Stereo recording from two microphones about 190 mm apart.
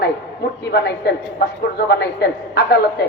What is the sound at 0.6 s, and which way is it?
A man's voice, 60° left (ahead or behind).